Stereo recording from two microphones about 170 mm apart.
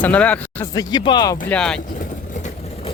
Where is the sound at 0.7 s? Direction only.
20° left (ahead or behind).